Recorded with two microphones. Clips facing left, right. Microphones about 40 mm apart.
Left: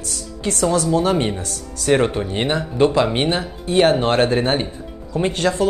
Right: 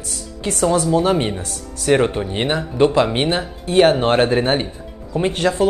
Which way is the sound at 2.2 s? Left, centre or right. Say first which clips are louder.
Even; right.